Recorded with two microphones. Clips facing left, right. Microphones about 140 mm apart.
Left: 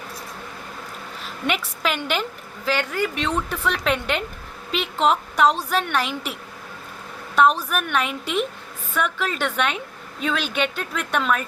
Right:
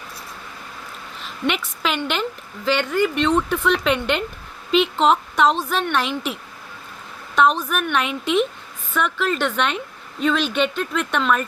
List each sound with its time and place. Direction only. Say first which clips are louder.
1.5 s a woman's voice: right 1 dB; 5° left (ahead or behind)
7.3 s speech: even; 5° left (ahead or behind)